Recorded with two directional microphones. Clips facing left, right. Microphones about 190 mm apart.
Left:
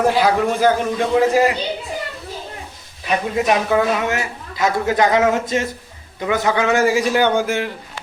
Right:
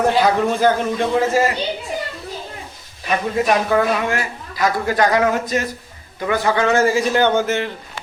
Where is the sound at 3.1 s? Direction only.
20° left (ahead or behind).